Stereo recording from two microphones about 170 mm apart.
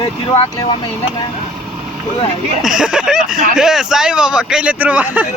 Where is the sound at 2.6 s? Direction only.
5° right (ahead or behind).